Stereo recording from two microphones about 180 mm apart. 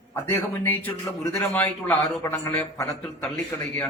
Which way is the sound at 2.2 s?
15° left (ahead or behind).